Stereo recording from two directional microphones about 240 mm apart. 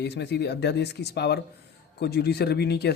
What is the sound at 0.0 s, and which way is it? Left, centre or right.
A man's voice, left.